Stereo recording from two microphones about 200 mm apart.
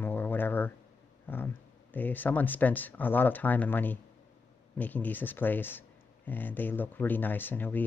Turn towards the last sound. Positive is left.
turn(degrees=10)  # may be behind; listen again after turning